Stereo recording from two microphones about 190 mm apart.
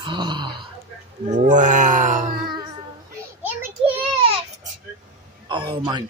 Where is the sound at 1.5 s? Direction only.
40° right (ahead or behind).